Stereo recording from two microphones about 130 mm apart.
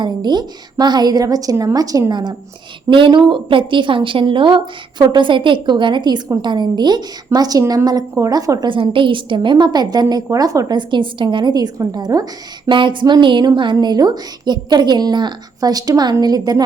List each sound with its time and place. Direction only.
0.0 s a woman's voice: 35° right (ahead or behind)